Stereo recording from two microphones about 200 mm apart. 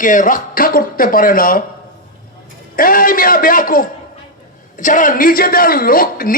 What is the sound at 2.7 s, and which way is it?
A man's voice, 45° left (ahead or behind).